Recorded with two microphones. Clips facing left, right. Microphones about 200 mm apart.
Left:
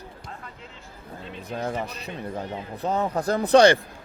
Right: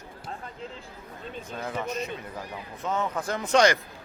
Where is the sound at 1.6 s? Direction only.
35° left (ahead or behind).